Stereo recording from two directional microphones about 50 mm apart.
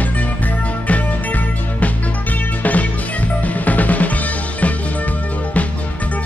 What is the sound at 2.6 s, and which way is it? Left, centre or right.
Music, left.